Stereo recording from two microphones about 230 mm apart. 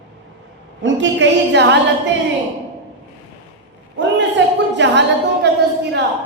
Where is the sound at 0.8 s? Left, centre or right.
Right.